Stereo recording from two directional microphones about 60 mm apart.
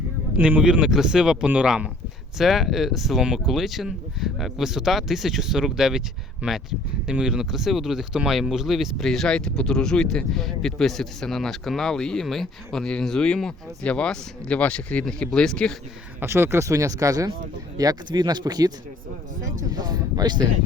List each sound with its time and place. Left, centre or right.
0.6 s speech: centre
16.2 s speech: right
16.6 s speech: right
17.8 s speech: right
18.5 s speech: right
19.5 s speech: right